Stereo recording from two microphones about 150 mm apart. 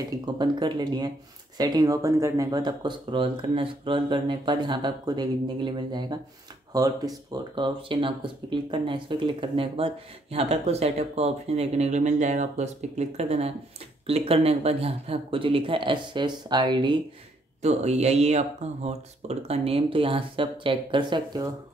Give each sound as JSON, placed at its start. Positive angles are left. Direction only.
{"t": 0.2, "sound": "speech", "side_deg": -30}
{"t": 7.3, "sound": "speech", "side_deg": -35}
{"t": 17.6, "sound": "speech", "side_deg": -50}